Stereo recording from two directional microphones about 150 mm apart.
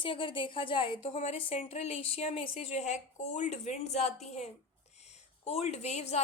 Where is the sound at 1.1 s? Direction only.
45° left (ahead or behind).